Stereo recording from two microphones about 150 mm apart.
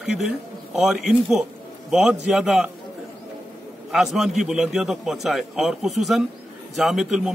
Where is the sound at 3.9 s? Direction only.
Centre (ahead or behind).